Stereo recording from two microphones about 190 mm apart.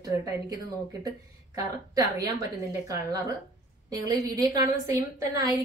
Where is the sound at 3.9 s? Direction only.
20° right (ahead or behind).